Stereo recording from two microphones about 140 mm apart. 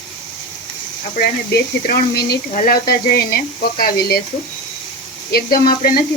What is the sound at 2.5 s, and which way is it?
Speech, 75° left (ahead or behind).